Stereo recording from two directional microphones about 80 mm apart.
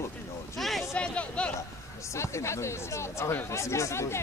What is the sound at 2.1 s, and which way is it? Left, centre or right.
Speech, left.